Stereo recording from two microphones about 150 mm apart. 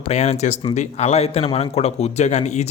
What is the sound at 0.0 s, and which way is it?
Speech, 45° left (ahead or behind).